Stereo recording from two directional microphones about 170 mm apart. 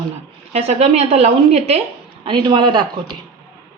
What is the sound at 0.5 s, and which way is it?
A woman's voice, 40° right (ahead or behind).